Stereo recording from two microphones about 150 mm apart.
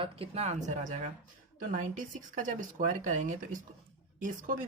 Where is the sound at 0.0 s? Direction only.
40° right (ahead or behind).